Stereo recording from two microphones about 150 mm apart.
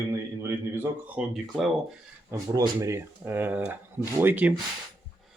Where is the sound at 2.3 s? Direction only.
20° right (ahead or behind).